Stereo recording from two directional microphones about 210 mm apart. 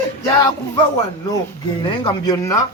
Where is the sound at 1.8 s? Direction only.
20° left (ahead or behind).